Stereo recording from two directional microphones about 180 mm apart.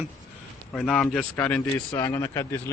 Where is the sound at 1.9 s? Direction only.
15° left (ahead or behind).